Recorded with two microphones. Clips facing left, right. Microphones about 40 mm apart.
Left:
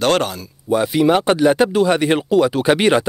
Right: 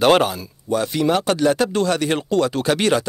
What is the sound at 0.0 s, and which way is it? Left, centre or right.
Speech, centre.